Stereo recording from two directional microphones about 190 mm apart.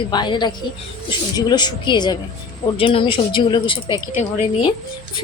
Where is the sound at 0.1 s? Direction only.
25° left (ahead or behind).